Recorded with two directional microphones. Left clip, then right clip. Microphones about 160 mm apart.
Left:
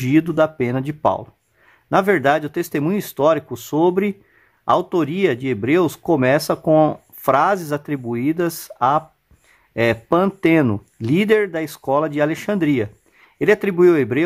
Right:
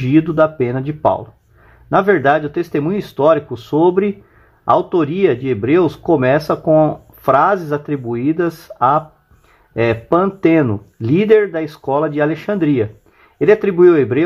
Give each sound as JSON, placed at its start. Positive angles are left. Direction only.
{"t": 0.0, "sound": "speech", "side_deg": 40}
{"t": 6.6, "sound": "speech", "side_deg": 45}
{"t": 10.1, "sound": "speech", "side_deg": 35}